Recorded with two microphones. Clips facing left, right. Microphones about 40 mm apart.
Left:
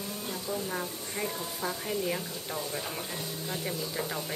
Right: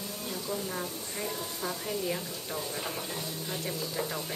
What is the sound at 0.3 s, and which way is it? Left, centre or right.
Speech, centre.